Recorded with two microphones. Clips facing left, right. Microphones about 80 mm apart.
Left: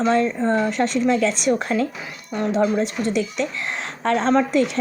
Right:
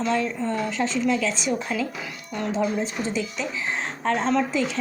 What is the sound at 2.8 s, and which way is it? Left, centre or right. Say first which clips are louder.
A woman's voice: left 5 dB; left.